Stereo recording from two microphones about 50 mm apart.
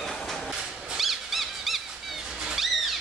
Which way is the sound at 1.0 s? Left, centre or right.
Centre.